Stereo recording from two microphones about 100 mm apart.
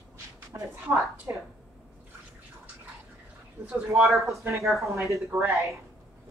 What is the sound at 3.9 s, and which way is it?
Speech, centre (ahead or behind).